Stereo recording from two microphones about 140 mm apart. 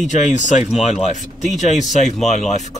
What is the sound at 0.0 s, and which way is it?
Speech, 60° left (ahead or behind).